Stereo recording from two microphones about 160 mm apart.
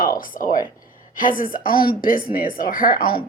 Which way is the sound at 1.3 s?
60° left (ahead or behind).